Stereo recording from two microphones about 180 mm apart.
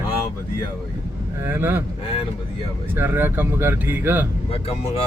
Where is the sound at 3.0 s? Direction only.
10° right (ahead or behind).